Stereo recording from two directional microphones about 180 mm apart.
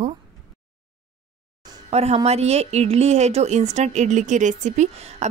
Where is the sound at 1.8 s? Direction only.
35° right (ahead or behind).